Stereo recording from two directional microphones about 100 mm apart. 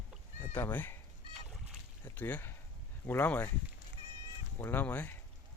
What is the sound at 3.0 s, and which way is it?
Speech, 20° left (ahead or behind).